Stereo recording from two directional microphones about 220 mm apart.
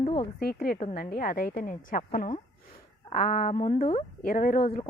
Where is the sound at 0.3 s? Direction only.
45° left (ahead or behind).